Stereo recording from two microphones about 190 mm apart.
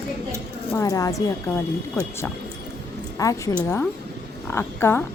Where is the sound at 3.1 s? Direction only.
15° left (ahead or behind).